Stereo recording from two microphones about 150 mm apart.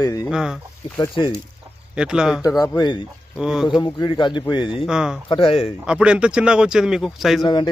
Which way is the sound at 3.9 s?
30° left (ahead or behind).